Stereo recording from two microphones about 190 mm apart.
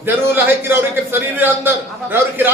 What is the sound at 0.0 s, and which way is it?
Speech, 10° right (ahead or behind).